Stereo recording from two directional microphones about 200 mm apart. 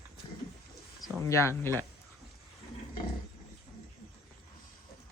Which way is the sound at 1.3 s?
15° left (ahead or behind).